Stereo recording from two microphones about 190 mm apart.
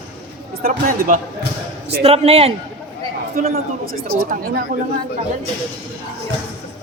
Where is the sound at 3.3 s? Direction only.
50° right (ahead or behind).